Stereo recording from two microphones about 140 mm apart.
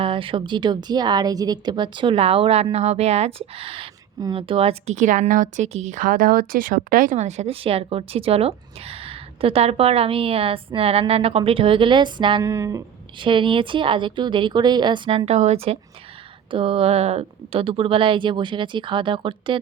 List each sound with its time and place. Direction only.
0.0 s speech: 40° right (ahead or behind)
4.9 s speech: 65° right (ahead or behind); by 12.4 s 35° right (ahead or behind)
12.4 s speech: 20° right (ahead or behind)
13.1 s speech: 35° right (ahead or behind)